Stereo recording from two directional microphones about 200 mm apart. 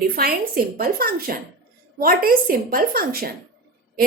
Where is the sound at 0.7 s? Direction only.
45° right (ahead or behind).